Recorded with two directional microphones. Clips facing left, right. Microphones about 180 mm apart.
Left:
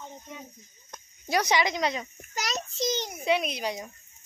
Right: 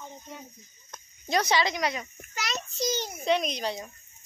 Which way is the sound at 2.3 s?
40° left (ahead or behind).